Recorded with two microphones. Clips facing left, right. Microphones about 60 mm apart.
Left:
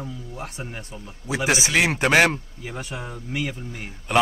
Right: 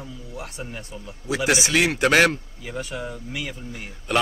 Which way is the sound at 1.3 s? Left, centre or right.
Centre.